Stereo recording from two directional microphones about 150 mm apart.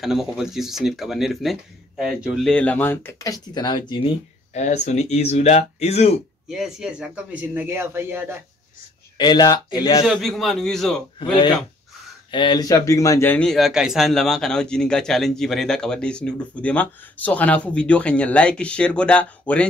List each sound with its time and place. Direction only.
0.0 s a man's voice: centre (ahead or behind); by 4.1 s 30° left (ahead or behind)
4.6 s speech: 50° left (ahead or behind)
6.5 s speech: 5° right (ahead or behind)
9.2 s speech: 30° left (ahead or behind)
10.0 s a man's voice: centre (ahead or behind)
12.3 s a man's voice: 30° left (ahead or behind); by 19.6 s 10° left (ahead or behind)